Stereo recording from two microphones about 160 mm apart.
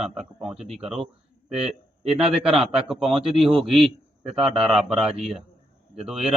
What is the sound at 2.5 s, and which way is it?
Speech, 35° right (ahead or behind).